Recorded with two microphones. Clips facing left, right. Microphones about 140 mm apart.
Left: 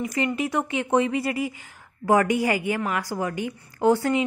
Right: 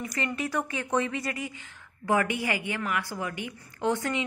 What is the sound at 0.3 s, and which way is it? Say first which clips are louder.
A woman's voice: left 5 dB; 25° left (ahead or behind).